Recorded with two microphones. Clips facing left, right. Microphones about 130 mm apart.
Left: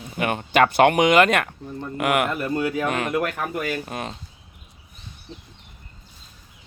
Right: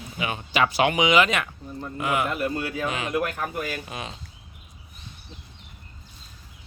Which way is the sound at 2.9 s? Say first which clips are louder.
Left 3 dB; 55° left (ahead or behind).